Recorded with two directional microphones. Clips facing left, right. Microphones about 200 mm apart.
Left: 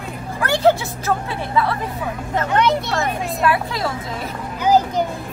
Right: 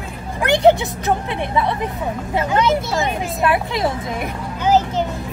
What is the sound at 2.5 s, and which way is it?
Speech, centre (ahead or behind).